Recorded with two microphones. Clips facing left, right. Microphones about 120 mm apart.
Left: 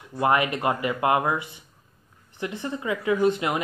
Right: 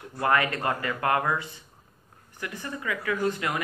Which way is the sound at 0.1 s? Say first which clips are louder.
Left 3 dB; 20° left (ahead or behind).